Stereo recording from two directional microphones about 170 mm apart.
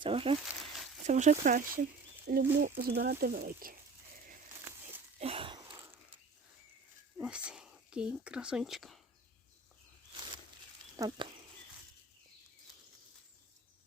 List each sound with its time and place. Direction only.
0.0 s speech: 35° right (ahead or behind)
1.0 s speech: 45° right (ahead or behind)
2.2 s speech: 65° right (ahead or behind)
5.2 s a sound: 35° right (ahead or behind)
5.7 s a sound: 15° right (ahead or behind)
7.2 s speech: 5° right (ahead or behind)
10.9 s speech: 20° right (ahead or behind)